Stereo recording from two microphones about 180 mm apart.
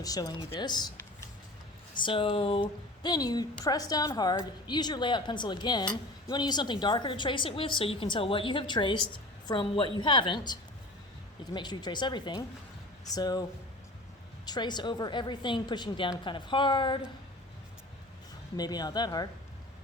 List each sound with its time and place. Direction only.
0.0 s a woman's voice: 20° left (ahead or behind)
14.4 s a woman's voice: 25° left (ahead or behind)
18.5 s a woman's voice: 20° left (ahead or behind)